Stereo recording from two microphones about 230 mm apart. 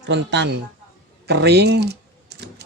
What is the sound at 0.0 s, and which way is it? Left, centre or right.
Speech, right.